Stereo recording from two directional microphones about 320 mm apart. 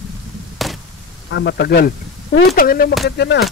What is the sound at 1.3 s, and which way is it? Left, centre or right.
A man's voice, left.